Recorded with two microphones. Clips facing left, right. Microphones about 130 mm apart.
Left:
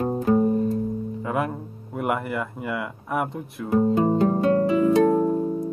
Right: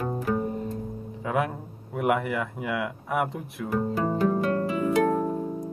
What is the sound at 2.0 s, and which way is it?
Speech, centre (ahead or behind).